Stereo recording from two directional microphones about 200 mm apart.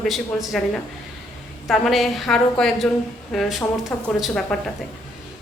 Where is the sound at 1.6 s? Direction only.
Centre (ahead or behind).